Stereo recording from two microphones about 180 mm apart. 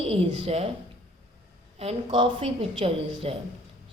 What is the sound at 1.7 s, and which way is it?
Speech, 35° right (ahead or behind).